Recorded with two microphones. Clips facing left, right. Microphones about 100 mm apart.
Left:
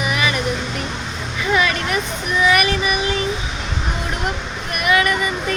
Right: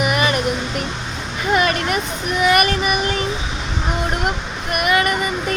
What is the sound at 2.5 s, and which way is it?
Child singing, 45° right (ahead or behind).